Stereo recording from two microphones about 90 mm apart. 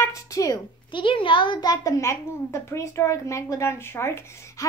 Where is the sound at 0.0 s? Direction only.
35° left (ahead or behind).